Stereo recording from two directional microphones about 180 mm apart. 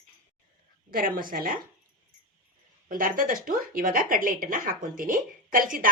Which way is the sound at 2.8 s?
50° right (ahead or behind).